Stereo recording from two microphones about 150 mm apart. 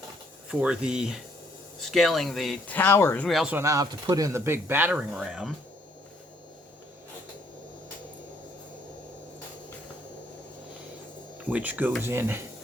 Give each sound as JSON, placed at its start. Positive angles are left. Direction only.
{"t": 0.6, "sound": "speech", "side_deg": -5}
{"t": 2.7, "sound": "speech", "side_deg": 15}
{"t": 3.2, "sound": "speech", "side_deg": 0}
{"t": 3.5, "sound": "speech", "side_deg": -20}
{"t": 11.3, "sound": "speech", "side_deg": -10}